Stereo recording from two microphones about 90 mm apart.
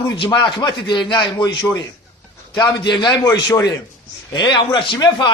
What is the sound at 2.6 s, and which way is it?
Speech, 55° left (ahead or behind).